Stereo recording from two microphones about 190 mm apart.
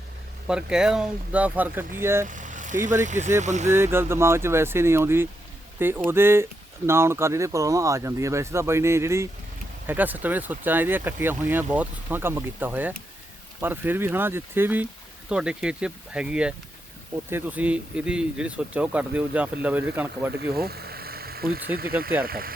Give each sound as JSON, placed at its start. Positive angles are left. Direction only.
{"t": 0.4, "sound": "speech", "side_deg": -5}
{"t": 2.2, "sound": "speech", "side_deg": -40}
{"t": 3.7, "sound": "speech", "side_deg": -10}
{"t": 20.6, "sound": "speech", "side_deg": -55}